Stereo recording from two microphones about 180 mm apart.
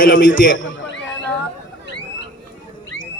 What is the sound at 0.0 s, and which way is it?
Speech, 50° left (ahead or behind).